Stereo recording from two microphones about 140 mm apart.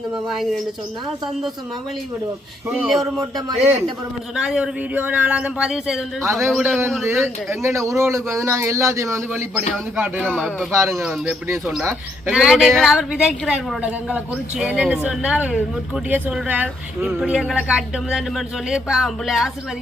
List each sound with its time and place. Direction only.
0.3 s speech: centre (ahead or behind)
2.7 s speech: centre (ahead or behind)
3.2 s speech: 25° right (ahead or behind)
4.4 s speech: 5° right (ahead or behind)
7.6 s speech: 20° right (ahead or behind)
10.7 s speech: 20° right (ahead or behind)
10.9 s speech: 5° right (ahead or behind)
11.4 s speech: 20° right (ahead or behind)
12.3 s speech: 5° right (ahead or behind)